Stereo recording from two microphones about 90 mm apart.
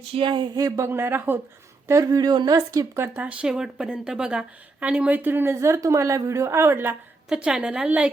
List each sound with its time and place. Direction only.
0.1 s a sound: 65° right (ahead or behind)
0.5 s a sound: 40° right (ahead or behind)
0.9 s a woman's voice: 25° right (ahead or behind)
1.9 s a woman's voice: 40° right (ahead or behind)
3.2 s a woman's voice: 10° right (ahead or behind)
7.3 s a woman's voice: 10° right (ahead or behind)